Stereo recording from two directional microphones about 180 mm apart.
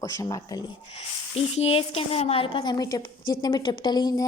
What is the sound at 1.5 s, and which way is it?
A woman's voice, 35° left (ahead or behind).